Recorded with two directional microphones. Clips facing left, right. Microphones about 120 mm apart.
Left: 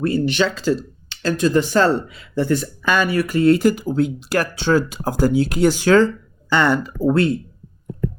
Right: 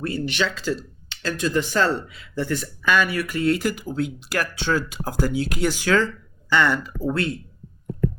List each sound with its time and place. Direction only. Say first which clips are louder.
0.0 s speech: left 6 dB; 35° left (ahead or behind)